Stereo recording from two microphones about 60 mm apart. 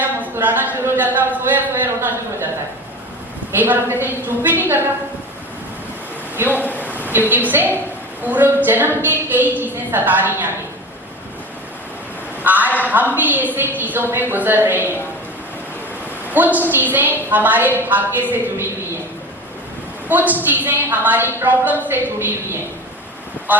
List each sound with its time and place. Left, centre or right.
0.0 s a sound: right
3.5 s a woman's voice: right
6.3 s speech: right
6.8 s a sound: right
7.3 s a woman's voice: right
12.4 s a man's voice: right
16.3 s a woman's voice: right
20.1 s a woman's voice: right